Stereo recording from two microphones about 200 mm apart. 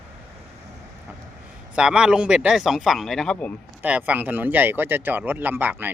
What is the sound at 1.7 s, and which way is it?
Speech, 5° right (ahead or behind).